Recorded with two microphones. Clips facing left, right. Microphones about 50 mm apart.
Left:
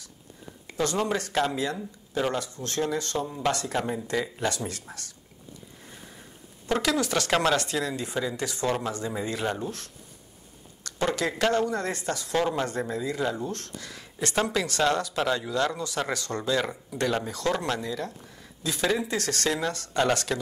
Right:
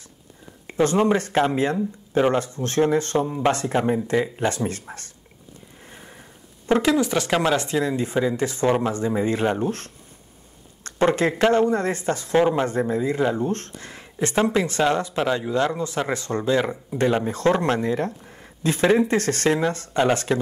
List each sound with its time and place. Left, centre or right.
0.7 s speech: right
5.9 s sniff: right
6.7 s speech: right
9.7 s speech: right